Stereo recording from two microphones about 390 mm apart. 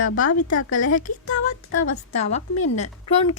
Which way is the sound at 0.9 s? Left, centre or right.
Centre.